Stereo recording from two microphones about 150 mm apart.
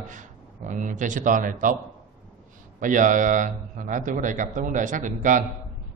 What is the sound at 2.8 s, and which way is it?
A man's voice, 60° right (ahead or behind).